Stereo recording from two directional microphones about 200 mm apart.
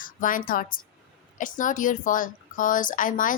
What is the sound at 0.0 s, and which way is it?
A woman's voice, 45° left (ahead or behind).